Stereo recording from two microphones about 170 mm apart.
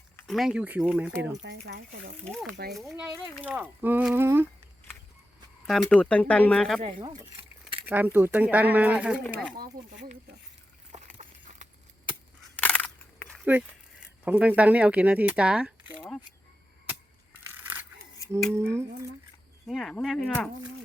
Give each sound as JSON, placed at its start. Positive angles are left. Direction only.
{"t": 0.3, "sound": "speech", "side_deg": 0}
{"t": 1.4, "sound": "speech", "side_deg": -90}
{"t": 2.2, "sound": "speech", "side_deg": 5}
{"t": 2.5, "sound": "speech", "side_deg": -70}
{"t": 2.7, "sound": "speech", "side_deg": 0}
{"t": 5.6, "sound": "speech", "side_deg": 5}
{"t": 6.8, "sound": "speech", "side_deg": -25}
{"t": 7.9, "sound": "speech", "side_deg": -10}
{"t": 9.8, "sound": "speech", "side_deg": -65}
{"t": 11.2, "sound": "a sound", "side_deg": -45}
{"t": 12.5, "sound": "a sound", "side_deg": 5}
{"t": 13.4, "sound": "speech", "side_deg": -10}
{"t": 18.5, "sound": "speech", "side_deg": -15}
{"t": 19.6, "sound": "speech", "side_deg": 0}